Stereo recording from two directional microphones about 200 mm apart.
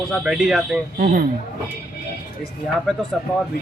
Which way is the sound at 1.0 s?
45° right (ahead or behind).